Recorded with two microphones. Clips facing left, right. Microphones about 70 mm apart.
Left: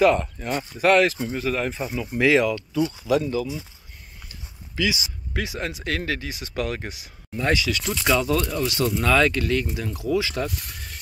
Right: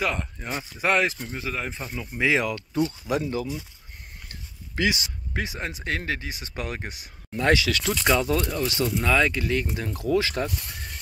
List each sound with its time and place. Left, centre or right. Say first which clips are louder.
0.0 s speech: left 9 dB; centre
0.8 s speech: left 5 dB; centre
1.1 s speech: left 6 dB; centre
1.8 s speech: left 6 dB; centre
2.4 s speech: left 3 dB; right
4.3 s a sound: even; right
5.3 s speech: left 2 dB; right
7.3 s speech: right 1 dB; right
8.1 s speech: left 2 dB; right
8.9 s speech: left 3 dB; centre
9.6 s speech: left 1 dB; right